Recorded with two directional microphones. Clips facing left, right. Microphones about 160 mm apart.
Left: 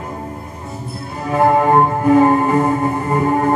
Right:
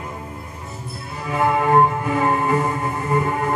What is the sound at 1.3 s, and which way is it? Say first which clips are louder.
Music: left 4 dB; 40° left (ahead or behind).